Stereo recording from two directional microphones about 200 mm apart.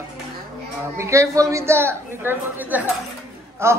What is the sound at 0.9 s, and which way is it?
A man's voice, 15° right (ahead or behind).